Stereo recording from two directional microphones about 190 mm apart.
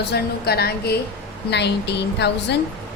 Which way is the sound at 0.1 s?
55° left (ahead or behind).